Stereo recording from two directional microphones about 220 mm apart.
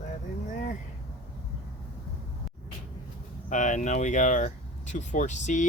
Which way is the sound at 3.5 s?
35° left (ahead or behind).